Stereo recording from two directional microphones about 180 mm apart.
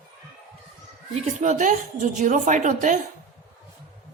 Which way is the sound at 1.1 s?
40° right (ahead or behind).